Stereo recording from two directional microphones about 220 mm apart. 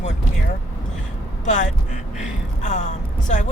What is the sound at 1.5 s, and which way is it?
Speech, 35° left (ahead or behind).